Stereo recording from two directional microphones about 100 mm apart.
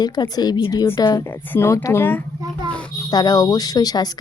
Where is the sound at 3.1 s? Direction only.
40° left (ahead or behind).